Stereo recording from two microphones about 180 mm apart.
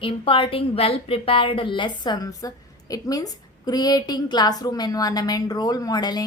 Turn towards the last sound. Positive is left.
turn(degrees=20)  # may be behind; listen again after turning